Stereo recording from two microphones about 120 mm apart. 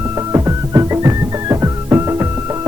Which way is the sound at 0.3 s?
25° right (ahead or behind).